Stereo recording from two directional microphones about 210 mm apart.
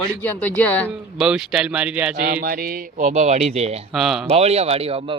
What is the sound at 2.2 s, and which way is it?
Speech, 45° right (ahead or behind).